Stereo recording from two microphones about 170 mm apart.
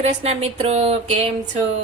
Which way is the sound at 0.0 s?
40° right (ahead or behind).